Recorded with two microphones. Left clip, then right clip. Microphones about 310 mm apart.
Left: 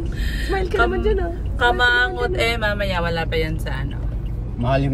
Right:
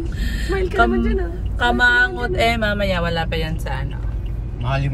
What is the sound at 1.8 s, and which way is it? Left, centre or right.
Speech, centre.